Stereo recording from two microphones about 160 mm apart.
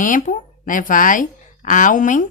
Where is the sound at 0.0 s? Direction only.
55° left (ahead or behind).